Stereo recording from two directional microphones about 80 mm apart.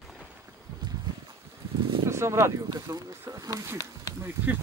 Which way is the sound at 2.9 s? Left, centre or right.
Right.